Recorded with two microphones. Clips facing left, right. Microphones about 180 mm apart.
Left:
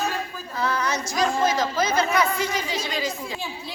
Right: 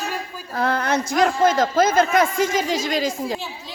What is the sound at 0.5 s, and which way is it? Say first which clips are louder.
Speech: right 5 dB; 55° right (ahead or behind).